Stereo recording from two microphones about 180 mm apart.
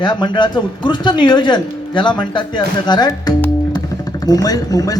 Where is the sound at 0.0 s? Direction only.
25° left (ahead or behind).